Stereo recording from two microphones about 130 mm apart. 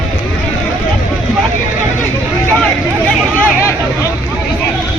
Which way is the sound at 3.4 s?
20° left (ahead or behind).